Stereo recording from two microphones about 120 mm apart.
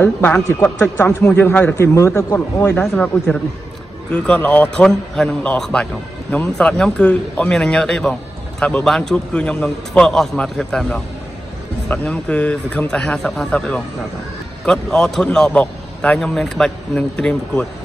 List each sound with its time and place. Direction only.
0.0 s a man's voice: 15° left (ahead or behind)
2.8 s a man's voice: 5° left (ahead or behind)